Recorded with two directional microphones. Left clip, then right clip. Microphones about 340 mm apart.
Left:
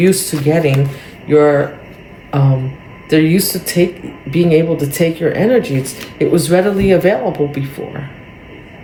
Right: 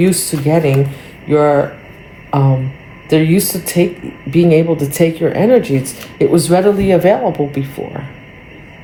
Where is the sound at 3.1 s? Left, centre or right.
Centre.